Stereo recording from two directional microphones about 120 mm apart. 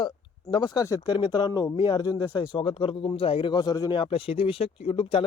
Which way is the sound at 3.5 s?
35° left (ahead or behind).